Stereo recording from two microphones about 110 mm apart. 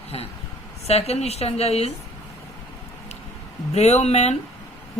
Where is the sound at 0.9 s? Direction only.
70° left (ahead or behind).